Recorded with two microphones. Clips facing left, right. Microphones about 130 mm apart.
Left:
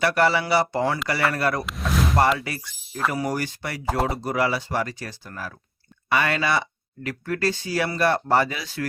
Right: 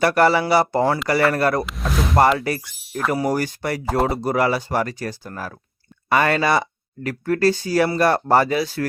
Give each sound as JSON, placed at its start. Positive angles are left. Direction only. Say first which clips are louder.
{"t": 0.0, "sound": "speech", "louder": "right 4 dB", "side_deg": -45}
{"t": 1.6, "sound": "a sound", "louder": "right 1 dB", "side_deg": 0}
{"t": 3.1, "sound": "speech", "louder": "right 8 dB", "side_deg": -40}
{"t": 3.8, "sound": "speech", "louder": "right 3 dB", "side_deg": 0}
{"t": 4.1, "sound": "speech", "louder": "right 4 dB", "side_deg": -40}